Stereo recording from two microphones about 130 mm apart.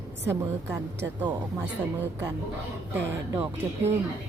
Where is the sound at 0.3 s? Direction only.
15° right (ahead or behind).